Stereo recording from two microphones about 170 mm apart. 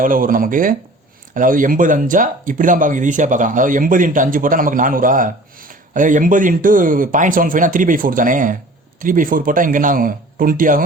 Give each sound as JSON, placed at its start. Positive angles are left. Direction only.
{"t": 0.0, "sound": "speech", "side_deg": -55}